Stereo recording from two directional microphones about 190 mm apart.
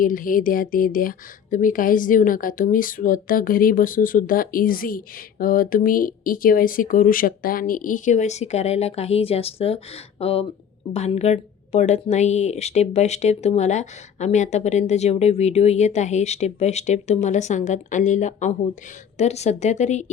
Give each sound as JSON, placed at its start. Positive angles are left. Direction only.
{"t": 0.0, "sound": "speech", "side_deg": 45}